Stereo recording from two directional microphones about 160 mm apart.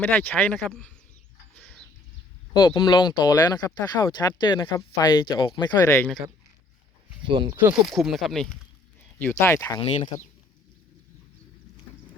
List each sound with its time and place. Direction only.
0.0 s speech: 15° left (ahead or behind)
1.5 s a sound: 10° left (ahead or behind)
2.5 s speech: 25° left (ahead or behind)
5.8 s speech: 15° left (ahead or behind)
7.3 s speech: 30° right (ahead or behind)
7.9 s speech: centre (ahead or behind)
9.4 s speech: 15° left (ahead or behind)
9.8 s speech: 40° left (ahead or behind)